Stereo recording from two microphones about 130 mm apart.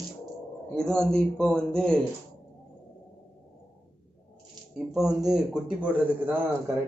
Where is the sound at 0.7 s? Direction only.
5° left (ahead or behind).